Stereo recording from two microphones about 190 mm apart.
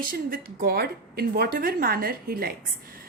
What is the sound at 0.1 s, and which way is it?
A woman's voice, 50° right (ahead or behind).